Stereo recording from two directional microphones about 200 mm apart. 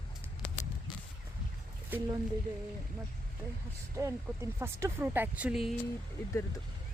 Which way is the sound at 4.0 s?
15° right (ahead or behind).